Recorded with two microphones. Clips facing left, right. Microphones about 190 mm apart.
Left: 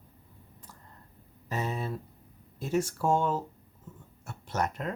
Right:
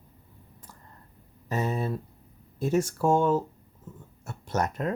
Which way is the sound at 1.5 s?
40° right (ahead or behind).